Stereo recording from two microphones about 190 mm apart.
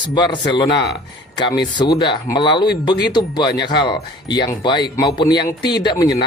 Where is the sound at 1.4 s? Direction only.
25° left (ahead or behind).